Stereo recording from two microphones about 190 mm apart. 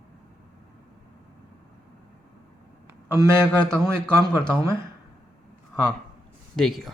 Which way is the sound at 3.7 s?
15° right (ahead or behind).